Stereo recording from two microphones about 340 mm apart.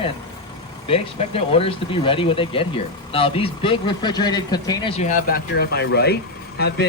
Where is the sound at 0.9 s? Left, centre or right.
Centre.